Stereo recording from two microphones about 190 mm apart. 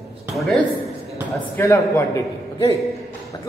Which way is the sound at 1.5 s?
15° left (ahead or behind).